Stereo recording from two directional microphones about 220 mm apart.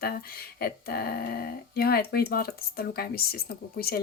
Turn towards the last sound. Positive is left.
turn(degrees=45)  # may be behind; listen again after turning